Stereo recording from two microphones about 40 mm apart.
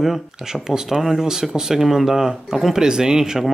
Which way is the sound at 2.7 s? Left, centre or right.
Centre.